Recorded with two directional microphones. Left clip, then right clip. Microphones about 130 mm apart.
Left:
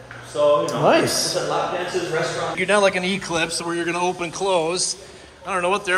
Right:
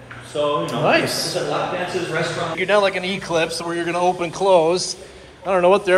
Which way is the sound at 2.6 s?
40° left (ahead or behind).